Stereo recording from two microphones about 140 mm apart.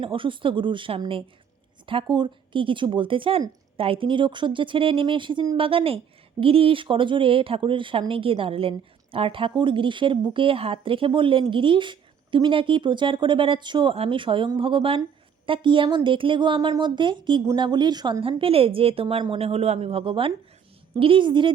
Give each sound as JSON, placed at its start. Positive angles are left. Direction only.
{"t": 0.0, "sound": "a woman's voice", "side_deg": -40}